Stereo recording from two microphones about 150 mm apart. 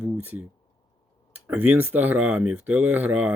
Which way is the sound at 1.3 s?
10° right (ahead or behind).